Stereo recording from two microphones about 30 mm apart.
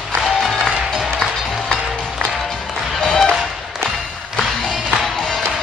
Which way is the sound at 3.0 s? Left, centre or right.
Left.